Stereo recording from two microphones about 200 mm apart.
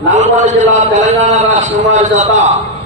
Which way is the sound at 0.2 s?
35° right (ahead or behind).